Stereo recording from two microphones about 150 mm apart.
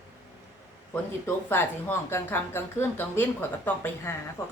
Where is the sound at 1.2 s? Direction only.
15° left (ahead or behind).